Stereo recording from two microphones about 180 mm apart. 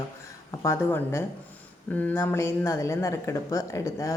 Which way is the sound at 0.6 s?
15° left (ahead or behind).